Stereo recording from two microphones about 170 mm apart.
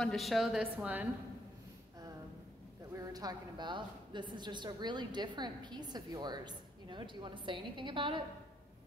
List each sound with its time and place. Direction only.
0.0 s a woman's voice: centre (ahead or behind)
2.9 s a woman's voice: 20° right (ahead or behind)